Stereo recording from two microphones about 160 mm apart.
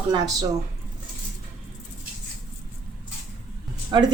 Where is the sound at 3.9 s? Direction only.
25° right (ahead or behind).